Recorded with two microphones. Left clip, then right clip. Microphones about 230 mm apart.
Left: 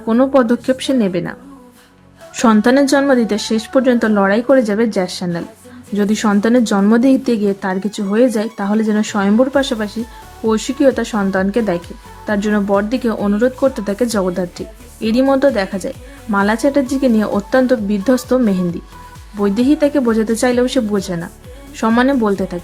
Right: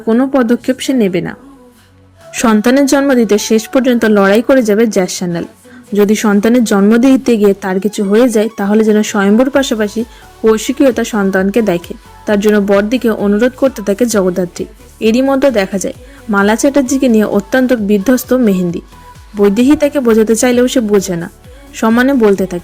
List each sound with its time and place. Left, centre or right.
0.1 s speech: centre